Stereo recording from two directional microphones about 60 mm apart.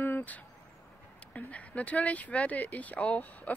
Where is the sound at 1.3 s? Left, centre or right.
Left.